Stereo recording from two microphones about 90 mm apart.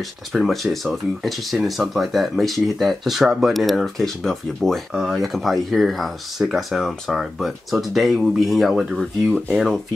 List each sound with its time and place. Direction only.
0.3 s speech: centre (ahead or behind)